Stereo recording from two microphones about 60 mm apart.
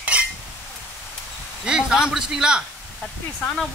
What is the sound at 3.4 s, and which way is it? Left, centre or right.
Speech, centre.